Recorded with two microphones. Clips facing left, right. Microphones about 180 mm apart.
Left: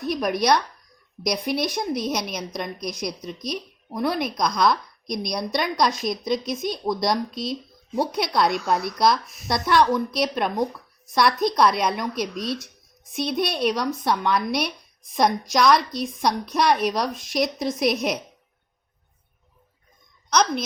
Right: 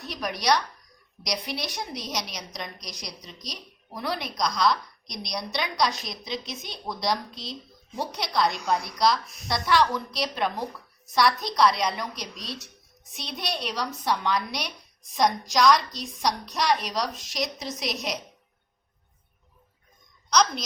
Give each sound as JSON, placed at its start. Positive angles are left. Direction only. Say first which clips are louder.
{"t": 0.0, "sound": "a woman's voice", "louder": "left 7 dB", "side_deg": 50}
{"t": 20.3, "sound": "a woman's voice", "louder": "left 2 dB", "side_deg": 55}